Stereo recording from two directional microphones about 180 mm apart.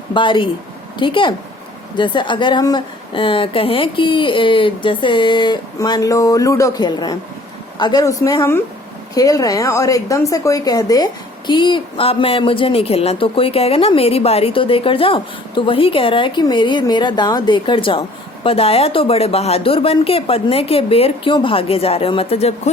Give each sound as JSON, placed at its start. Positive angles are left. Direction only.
{"t": 0.1, "sound": "speech", "side_deg": 25}